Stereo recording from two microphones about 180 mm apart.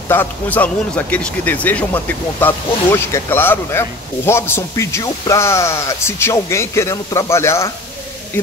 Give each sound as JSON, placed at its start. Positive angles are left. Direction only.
{"t": 0.1, "sound": "speech", "side_deg": 10}